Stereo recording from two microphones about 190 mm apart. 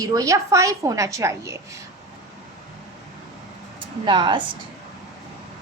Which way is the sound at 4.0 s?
25° right (ahead or behind).